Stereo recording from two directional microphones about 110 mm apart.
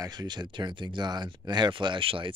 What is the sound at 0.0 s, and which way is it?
Speech, 35° right (ahead or behind).